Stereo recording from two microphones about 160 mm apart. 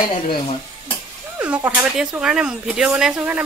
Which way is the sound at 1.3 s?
10° right (ahead or behind).